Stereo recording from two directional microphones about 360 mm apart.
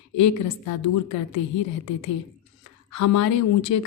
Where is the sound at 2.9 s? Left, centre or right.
Left.